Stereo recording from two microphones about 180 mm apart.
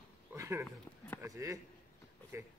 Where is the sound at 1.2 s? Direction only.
15° right (ahead or behind).